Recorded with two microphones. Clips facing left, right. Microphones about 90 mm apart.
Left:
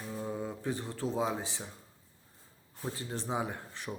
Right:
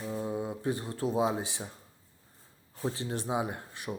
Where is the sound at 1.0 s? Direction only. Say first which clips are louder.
Right 4 dB; 15° right (ahead or behind).